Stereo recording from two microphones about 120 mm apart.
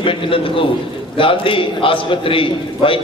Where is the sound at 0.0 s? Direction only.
45° left (ahead or behind).